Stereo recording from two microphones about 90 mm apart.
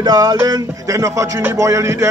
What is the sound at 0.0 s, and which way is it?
Speech, 45° right (ahead or behind).